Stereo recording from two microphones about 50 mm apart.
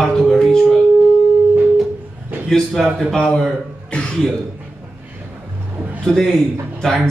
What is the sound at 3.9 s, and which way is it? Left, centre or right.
Cough, centre.